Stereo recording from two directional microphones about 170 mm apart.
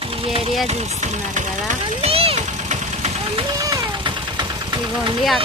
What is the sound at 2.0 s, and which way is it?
Vehicle, 35° right (ahead or behind).